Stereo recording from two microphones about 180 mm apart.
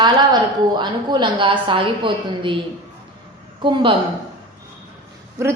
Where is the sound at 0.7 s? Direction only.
25° right (ahead or behind).